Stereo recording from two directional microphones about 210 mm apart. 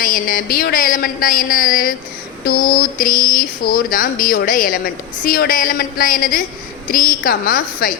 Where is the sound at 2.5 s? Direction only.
45° left (ahead or behind).